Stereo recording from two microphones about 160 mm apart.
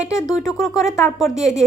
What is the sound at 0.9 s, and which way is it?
Speech, 15° left (ahead or behind).